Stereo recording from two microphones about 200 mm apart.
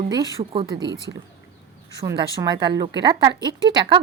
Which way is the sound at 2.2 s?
20° right (ahead or behind).